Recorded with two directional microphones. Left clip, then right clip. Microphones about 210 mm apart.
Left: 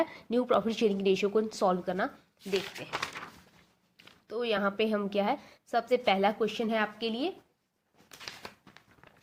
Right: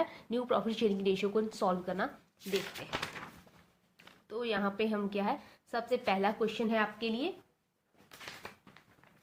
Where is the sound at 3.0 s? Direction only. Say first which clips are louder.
Left 4 dB; 30° left (ahead or behind).